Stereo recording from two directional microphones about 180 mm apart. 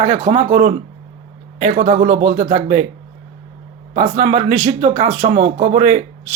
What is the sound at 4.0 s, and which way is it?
Speech, 35° right (ahead or behind).